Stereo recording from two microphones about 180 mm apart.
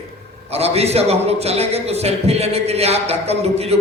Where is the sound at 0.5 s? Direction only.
35° right (ahead or behind).